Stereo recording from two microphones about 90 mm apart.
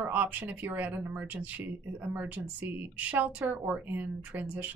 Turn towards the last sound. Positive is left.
turn(degrees=-20)  # may be behind; listen again after turning